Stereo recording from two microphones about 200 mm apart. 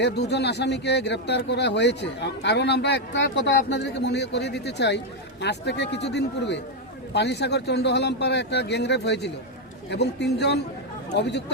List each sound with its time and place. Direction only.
0.0 s a man's voice: 55° left (ahead or behind)